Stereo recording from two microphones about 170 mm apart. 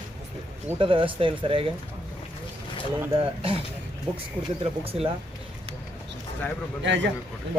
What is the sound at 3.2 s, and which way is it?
Speech, 35° right (ahead or behind).